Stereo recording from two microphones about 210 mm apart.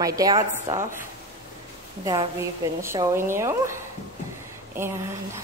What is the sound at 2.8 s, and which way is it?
A woman's voice, 15° right (ahead or behind).